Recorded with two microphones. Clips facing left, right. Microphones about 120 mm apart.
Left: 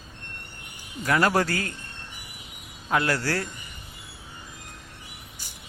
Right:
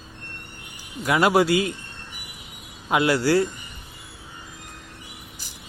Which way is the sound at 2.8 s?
15° right (ahead or behind).